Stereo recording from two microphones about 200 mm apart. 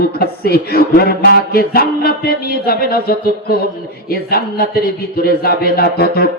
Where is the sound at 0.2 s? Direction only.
50° left (ahead or behind).